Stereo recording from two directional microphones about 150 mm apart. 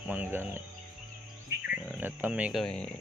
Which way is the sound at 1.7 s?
15° right (ahead or behind).